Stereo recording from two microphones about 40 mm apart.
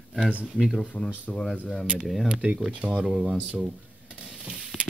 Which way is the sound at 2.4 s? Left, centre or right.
Right.